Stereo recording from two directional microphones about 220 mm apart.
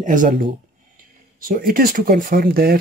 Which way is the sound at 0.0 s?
35° right (ahead or behind).